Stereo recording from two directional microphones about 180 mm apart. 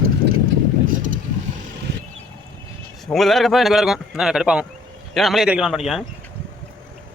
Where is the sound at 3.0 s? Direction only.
Centre (ahead or behind).